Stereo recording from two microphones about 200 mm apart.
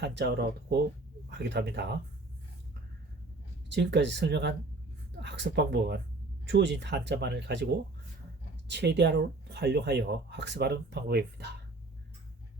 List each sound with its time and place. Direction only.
0.0 s speech: 60° right (ahead or behind)
3.7 s speech: 60° right (ahead or behind)
8.7 s speech: 55° right (ahead or behind)